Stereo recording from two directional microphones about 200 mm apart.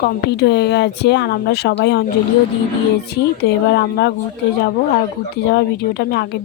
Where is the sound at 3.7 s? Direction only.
60° left (ahead or behind).